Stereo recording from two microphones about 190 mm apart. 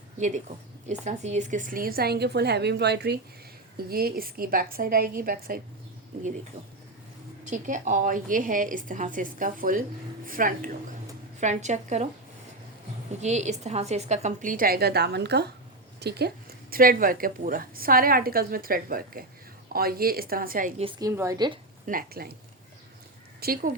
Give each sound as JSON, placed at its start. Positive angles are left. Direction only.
{"t": 0.2, "sound": "a woman's voice", "side_deg": -40}
{"t": 7.4, "sound": "a woman's voice", "side_deg": -40}
{"t": 13.2, "sound": "a woman's voice", "side_deg": -35}
{"t": 20.8, "sound": "a woman's voice", "side_deg": -15}
{"t": 21.8, "sound": "a woman's voice", "side_deg": -50}
{"t": 23.4, "sound": "a woman's voice", "side_deg": -50}